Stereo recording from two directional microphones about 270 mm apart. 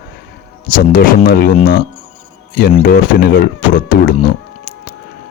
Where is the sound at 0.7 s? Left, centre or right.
Left.